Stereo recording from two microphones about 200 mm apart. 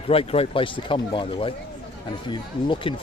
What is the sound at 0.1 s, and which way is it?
Speech, 30° left (ahead or behind).